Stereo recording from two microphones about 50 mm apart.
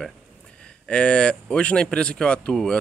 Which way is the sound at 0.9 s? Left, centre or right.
Left.